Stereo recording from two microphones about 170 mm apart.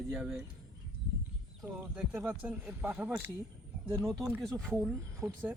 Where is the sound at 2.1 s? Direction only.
10° right (ahead or behind).